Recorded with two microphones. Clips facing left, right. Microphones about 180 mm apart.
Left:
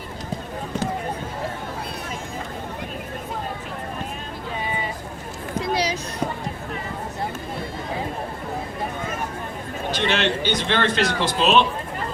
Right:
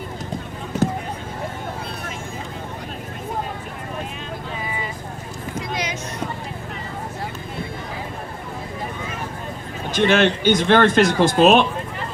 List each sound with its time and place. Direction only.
5.5 s children playing: 35° left (ahead or behind)
9.9 s speech: 50° right (ahead or behind)